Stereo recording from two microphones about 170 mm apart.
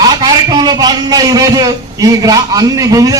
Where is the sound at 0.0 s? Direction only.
20° right (ahead or behind).